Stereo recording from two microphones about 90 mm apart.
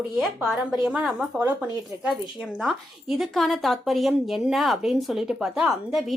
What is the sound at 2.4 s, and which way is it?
Speech, centre (ahead or behind).